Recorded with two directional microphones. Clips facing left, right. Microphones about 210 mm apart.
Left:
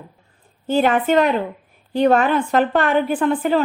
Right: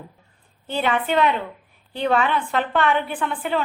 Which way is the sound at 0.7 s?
45° left (ahead or behind).